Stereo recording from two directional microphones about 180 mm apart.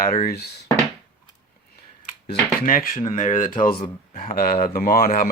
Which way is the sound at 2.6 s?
50° left (ahead or behind).